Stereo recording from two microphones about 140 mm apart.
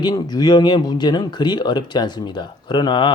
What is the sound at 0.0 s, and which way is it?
Speech, 30° left (ahead or behind).